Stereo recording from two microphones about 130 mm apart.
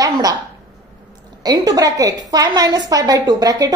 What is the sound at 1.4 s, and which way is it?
A woman's voice, 30° right (ahead or behind).